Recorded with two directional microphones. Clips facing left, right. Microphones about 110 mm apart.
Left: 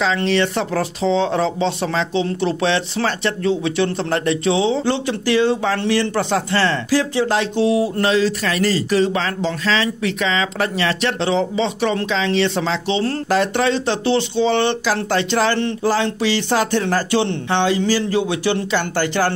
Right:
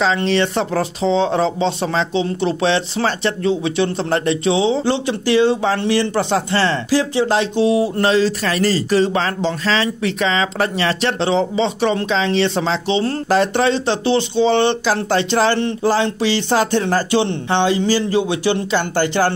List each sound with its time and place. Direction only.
0.0 s speech: 30° right (ahead or behind)